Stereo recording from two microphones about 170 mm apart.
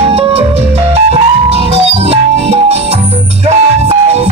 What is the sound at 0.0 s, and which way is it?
Music, 35° right (ahead or behind).